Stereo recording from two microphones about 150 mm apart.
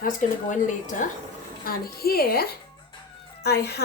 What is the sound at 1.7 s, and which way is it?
Speech, 90° left.